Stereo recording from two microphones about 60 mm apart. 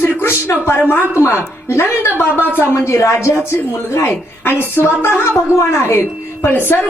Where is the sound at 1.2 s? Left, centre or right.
Left.